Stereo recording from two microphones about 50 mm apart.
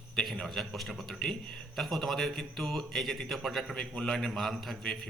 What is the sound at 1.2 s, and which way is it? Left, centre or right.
Speech, centre.